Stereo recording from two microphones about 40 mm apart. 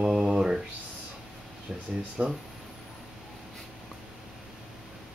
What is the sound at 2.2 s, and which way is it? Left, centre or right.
Speech, right.